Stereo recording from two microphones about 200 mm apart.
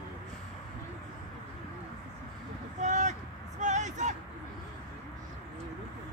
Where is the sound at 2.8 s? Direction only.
35° right (ahead or behind).